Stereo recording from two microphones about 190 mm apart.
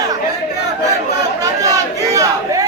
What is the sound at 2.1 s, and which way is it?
Battle cry, 15° right (ahead or behind).